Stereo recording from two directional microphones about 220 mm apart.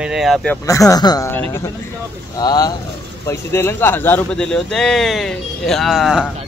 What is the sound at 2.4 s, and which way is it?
Speech, 20° left (ahead or behind).